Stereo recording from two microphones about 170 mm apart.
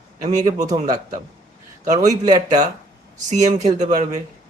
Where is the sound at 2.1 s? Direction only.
20° right (ahead or behind).